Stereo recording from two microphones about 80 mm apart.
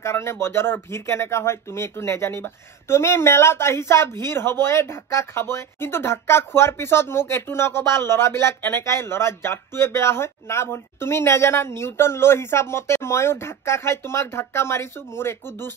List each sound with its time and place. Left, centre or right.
0.0 s speech: left